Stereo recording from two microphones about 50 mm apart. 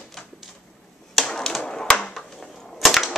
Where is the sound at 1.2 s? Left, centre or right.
Centre.